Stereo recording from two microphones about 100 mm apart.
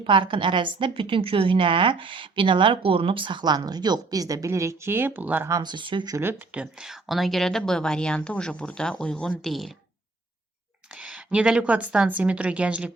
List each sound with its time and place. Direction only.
0.0 s a woman's voice: 60° right (ahead or behind); by 5.5 s 20° right (ahead or behind)
5.5 s speech: 35° right (ahead or behind)
5.7 s speech: 50° right (ahead or behind)
6.5 s speech: 10° right (ahead or behind)
10.9 s a woman's voice: 10° right (ahead or behind)